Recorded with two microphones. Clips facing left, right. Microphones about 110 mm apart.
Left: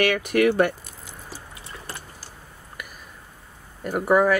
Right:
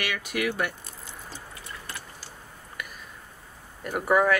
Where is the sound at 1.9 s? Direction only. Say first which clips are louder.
Left 2 dB; 35° left (ahead or behind).